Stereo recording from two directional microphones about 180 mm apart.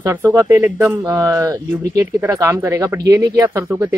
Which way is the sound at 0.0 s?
15° right (ahead or behind).